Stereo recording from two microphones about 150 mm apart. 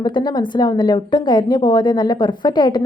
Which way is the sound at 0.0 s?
30° left (ahead or behind).